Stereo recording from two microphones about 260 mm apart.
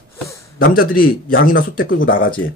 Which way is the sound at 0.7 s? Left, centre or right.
Left.